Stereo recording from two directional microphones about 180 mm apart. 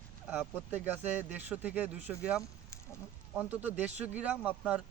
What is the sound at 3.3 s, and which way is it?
Speech, 10° right (ahead or behind).